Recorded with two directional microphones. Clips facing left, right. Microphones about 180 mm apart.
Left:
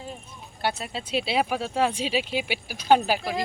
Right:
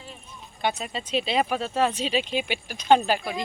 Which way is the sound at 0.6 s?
5° left (ahead or behind).